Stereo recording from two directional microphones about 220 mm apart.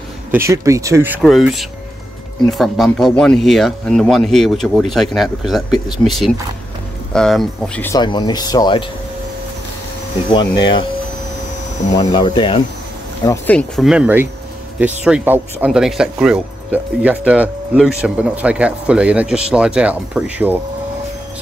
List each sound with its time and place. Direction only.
0.3 s speech: 10° right (ahead or behind)
1.2 s speech: centre (ahead or behind)
8.0 s speech: 20° left (ahead or behind)
10.6 s speech: 20° left (ahead or behind)
12.0 s speech: 20° left (ahead or behind)
13.2 s speech: 10° left (ahead or behind); by 20.5 s 5° right (ahead or behind)